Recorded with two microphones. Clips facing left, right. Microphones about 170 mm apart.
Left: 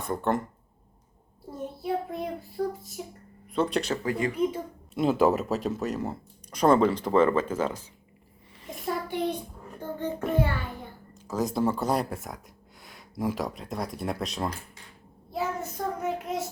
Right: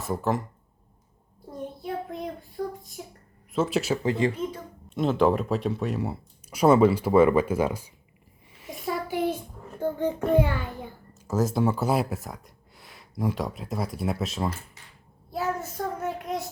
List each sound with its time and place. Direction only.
0.0 s speech: centre (ahead or behind)
1.8 s a child's voice: 5° left (ahead or behind)
4.0 s speech: 25° right (ahead or behind)
4.9 s speech: 5° left (ahead or behind); by 7.9 s 10° right (ahead or behind)
8.6 s a sound: centre (ahead or behind)
10.3 s a child's voice: 15° right (ahead or behind)
16.0 s child singing: centre (ahead or behind)